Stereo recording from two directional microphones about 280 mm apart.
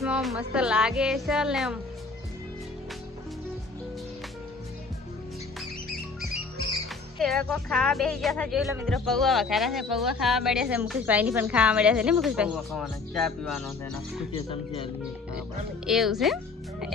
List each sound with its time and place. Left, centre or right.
0.0 s speech: centre
7.2 s speech: centre
14.3 s speech: centre
15.9 s speech: centre